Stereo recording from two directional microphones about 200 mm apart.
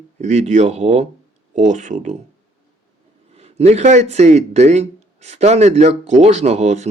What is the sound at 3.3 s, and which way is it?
A man's voice, 30° right (ahead or behind).